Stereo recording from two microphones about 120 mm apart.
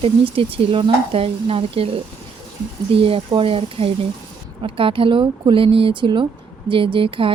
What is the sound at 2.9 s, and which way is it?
Speech, 50° right (ahead or behind).